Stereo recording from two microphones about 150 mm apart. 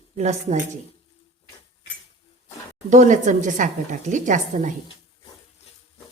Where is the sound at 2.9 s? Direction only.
55° right (ahead or behind).